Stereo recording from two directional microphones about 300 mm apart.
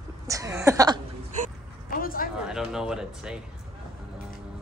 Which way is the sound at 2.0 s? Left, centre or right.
Left.